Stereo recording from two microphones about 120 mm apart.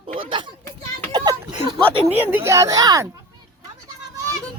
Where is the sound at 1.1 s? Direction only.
35° right (ahead or behind).